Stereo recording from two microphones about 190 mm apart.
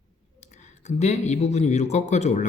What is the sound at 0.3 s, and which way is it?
Speech, 40° left (ahead or behind).